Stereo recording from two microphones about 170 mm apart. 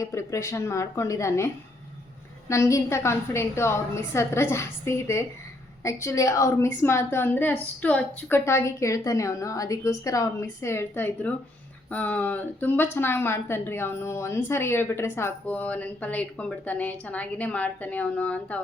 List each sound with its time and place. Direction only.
0.0 s speech: 20° left (ahead or behind)
2.5 s speech: 15° left (ahead or behind)